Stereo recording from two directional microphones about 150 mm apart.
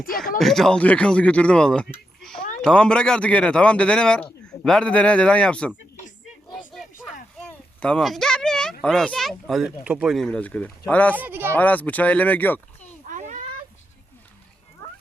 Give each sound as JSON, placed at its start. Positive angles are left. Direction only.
{"t": 0.3, "sound": "a man's voice", "side_deg": 5}
{"t": 6.2, "sound": "a sound", "side_deg": 0}
{"t": 7.3, "sound": "speech", "side_deg": 10}
{"t": 11.1, "sound": "speech", "side_deg": -10}
{"t": 11.5, "sound": "a man's voice", "side_deg": 10}
{"t": 13.1, "sound": "a sound", "side_deg": -60}